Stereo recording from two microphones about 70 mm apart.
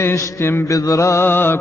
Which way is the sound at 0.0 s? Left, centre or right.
Left.